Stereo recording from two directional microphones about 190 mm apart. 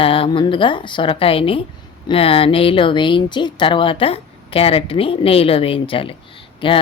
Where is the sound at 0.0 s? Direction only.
30° left (ahead or behind).